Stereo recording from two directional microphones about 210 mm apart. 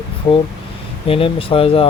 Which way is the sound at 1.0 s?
25° left (ahead or behind).